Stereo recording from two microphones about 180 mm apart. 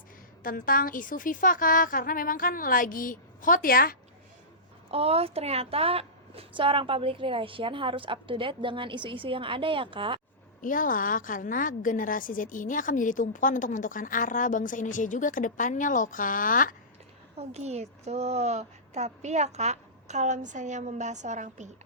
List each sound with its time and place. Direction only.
0.4 s a woman's voice: 50° left (ahead or behind)
4.9 s a woman's voice: 35° right (ahead or behind)
10.6 s a woman's voice: 50° left (ahead or behind)
17.3 s a woman's voice: 35° right (ahead or behind)